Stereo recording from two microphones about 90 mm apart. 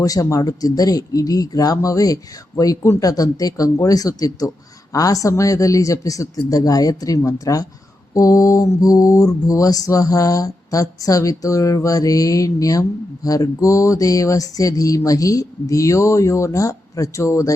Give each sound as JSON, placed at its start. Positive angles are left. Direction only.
{"t": 0.0, "sound": "mantra", "side_deg": 40}